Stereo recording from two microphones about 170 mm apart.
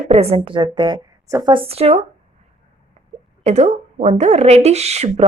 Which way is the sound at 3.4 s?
40° right (ahead or behind).